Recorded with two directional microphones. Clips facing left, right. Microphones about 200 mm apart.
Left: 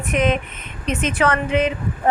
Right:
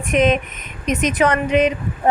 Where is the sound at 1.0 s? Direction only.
15° right (ahead or behind).